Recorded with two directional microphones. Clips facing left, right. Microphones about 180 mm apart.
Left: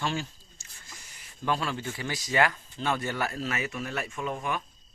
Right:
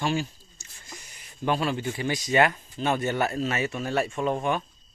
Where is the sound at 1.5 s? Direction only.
20° right (ahead or behind).